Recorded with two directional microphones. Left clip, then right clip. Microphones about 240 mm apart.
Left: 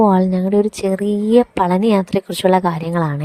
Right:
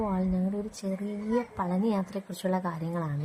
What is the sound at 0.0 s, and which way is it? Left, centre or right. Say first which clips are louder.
Speech: left 17 dB; left.